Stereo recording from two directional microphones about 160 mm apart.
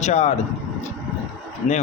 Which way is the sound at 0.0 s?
45° left (ahead or behind).